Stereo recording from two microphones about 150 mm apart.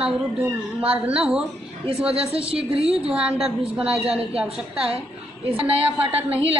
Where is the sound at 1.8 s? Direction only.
40° right (ahead or behind).